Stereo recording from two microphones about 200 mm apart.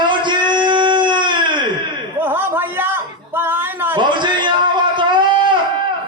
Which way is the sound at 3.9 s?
25° right (ahead or behind).